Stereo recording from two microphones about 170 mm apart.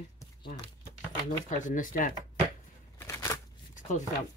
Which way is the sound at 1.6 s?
50° left (ahead or behind).